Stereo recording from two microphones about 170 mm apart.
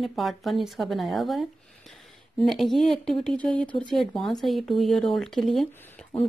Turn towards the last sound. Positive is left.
turn(degrees=0)  # may be behind; listen again after turning